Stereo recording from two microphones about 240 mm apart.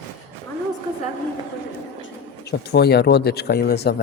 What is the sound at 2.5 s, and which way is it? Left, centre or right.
Speech, left.